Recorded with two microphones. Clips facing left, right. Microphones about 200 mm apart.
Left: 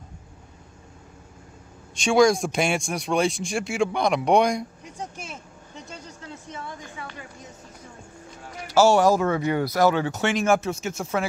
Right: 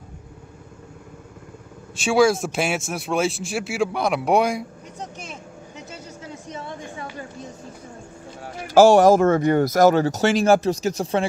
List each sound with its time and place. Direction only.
2.0 s speech: 5° right (ahead or behind)
4.9 s vehicle: 5° left (ahead or behind)
8.9 s speech: 50° right (ahead or behind)